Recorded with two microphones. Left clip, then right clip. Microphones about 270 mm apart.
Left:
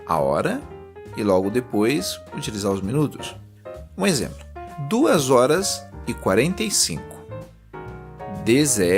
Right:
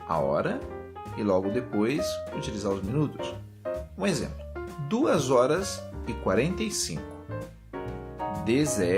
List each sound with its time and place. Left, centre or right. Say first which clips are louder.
0.1 s speech: left 6 dB; left
8.4 s speech: left 8 dB; left